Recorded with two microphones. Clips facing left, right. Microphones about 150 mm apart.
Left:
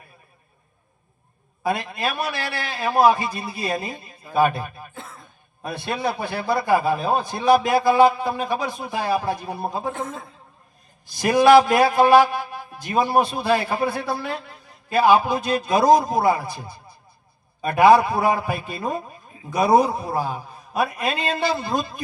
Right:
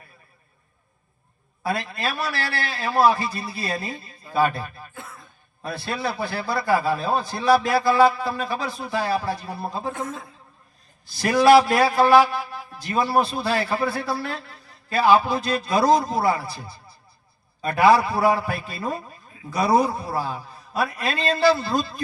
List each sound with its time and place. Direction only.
1.6 s a man's voice: 15° left (ahead or behind)
11.2 s a man's voice: 15° left (ahead or behind)
17.7 s a man's voice: 15° left (ahead or behind)